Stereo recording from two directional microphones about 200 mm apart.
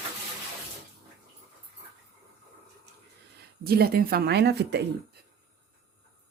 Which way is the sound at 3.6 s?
50° right (ahead or behind).